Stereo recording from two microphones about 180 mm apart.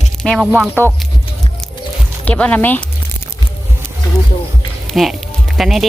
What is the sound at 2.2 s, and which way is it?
Speech, 10° left (ahead or behind).